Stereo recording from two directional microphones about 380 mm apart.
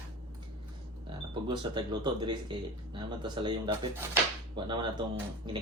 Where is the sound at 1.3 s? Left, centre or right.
Centre.